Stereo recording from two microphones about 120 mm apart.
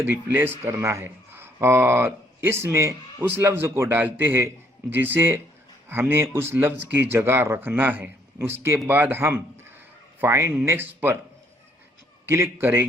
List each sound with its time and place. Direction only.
0.0 s speech: 15° right (ahead or behind)
12.3 s speech: 20° right (ahead or behind)